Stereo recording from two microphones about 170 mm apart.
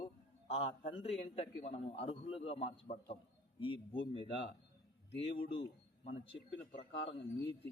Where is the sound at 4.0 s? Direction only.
30° left (ahead or behind).